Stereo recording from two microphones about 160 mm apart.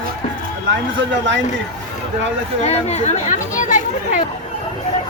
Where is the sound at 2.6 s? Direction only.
40° left (ahead or behind).